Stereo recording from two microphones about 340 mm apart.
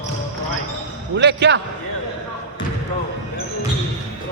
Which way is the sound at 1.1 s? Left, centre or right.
Right.